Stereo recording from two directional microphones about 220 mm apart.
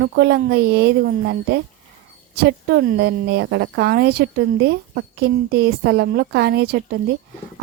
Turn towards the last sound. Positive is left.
turn(degrees=-45)  # may be behind; listen again after turning